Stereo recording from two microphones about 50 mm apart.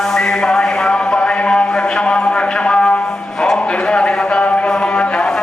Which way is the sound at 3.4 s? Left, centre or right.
Centre.